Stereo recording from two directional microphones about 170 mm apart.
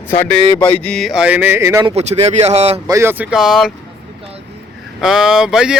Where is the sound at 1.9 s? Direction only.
40° right (ahead or behind).